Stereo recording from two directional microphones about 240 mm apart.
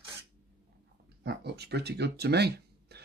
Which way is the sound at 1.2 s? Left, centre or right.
Right.